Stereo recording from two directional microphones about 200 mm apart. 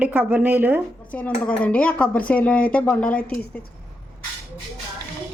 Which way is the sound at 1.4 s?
5° left (ahead or behind).